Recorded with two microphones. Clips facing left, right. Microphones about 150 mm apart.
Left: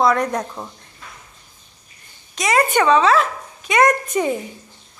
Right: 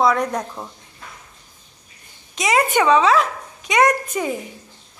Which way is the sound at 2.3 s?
15° right (ahead or behind).